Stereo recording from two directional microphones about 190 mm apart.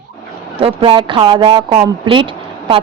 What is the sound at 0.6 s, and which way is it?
A woman's voice, 30° right (ahead or behind).